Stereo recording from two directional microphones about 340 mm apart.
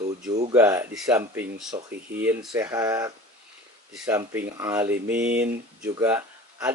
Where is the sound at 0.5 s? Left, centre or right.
Centre.